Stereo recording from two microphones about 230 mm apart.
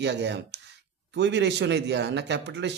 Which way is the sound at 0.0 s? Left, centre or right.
Right.